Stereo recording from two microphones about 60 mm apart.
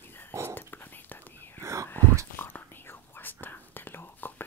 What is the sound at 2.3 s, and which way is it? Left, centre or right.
Whispering, left.